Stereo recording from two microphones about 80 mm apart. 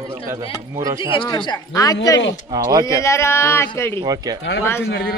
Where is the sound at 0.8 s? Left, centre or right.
Right.